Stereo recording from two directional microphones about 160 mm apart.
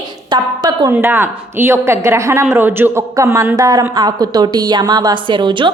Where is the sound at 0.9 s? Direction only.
15° right (ahead or behind).